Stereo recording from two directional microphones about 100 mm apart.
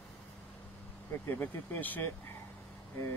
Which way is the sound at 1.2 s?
20° left (ahead or behind).